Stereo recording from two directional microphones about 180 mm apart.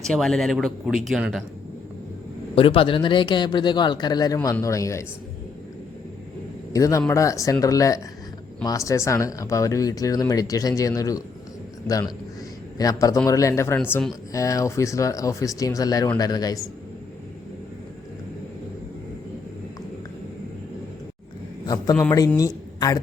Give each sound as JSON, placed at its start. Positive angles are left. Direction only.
{"t": 0.0, "sound": "speech", "side_deg": 0}
{"t": 2.6, "sound": "a man's voice", "side_deg": 30}
{"t": 6.7, "sound": "a man's voice", "side_deg": 20}
{"t": 14.3, "sound": "speech", "side_deg": 15}
{"t": 22.4, "sound": "speech", "side_deg": 20}